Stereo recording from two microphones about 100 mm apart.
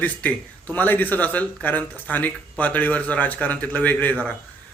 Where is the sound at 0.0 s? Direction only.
15° left (ahead or behind).